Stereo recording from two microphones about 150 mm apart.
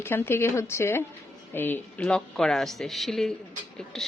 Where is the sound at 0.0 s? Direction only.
15° left (ahead or behind).